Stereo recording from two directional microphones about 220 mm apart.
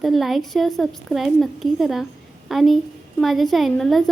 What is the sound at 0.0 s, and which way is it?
Speech, centre (ahead or behind).